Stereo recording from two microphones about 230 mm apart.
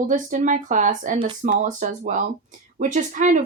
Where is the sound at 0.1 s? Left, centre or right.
Right.